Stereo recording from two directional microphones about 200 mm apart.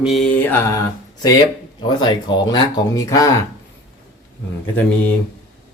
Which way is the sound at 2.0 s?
20° left (ahead or behind).